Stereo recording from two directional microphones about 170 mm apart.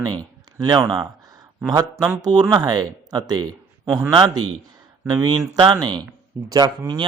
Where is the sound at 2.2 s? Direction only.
25° right (ahead or behind).